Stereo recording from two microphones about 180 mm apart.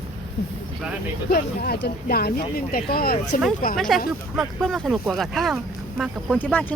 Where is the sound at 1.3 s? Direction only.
60° left (ahead or behind).